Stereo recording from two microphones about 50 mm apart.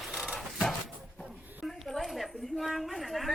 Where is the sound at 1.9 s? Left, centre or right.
Centre.